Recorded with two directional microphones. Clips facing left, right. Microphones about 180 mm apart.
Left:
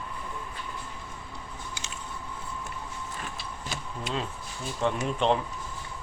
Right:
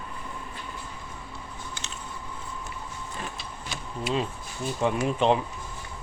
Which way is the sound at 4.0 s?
5° right (ahead or behind).